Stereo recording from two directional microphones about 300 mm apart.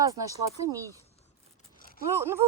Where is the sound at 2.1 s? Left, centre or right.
Centre.